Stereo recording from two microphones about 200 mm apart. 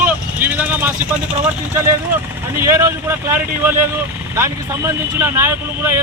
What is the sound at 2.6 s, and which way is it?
A man's voice, 15° right (ahead or behind).